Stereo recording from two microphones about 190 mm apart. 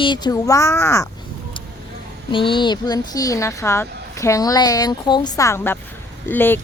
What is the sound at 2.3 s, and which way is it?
Speech, 25° left (ahead or behind).